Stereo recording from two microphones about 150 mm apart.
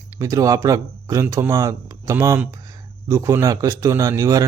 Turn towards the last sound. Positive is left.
turn(degrees=-20)  # may be behind; listen again after turning